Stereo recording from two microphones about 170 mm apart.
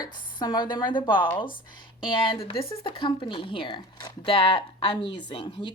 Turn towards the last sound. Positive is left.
turn(degrees=25)  # may be behind; listen again after turning